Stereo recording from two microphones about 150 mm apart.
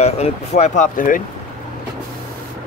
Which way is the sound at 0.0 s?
45° left (ahead or behind).